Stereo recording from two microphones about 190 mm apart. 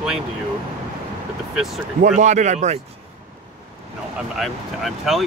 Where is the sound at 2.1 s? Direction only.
40° right (ahead or behind).